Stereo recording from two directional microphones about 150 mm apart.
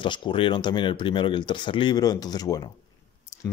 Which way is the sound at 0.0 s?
30° left (ahead or behind).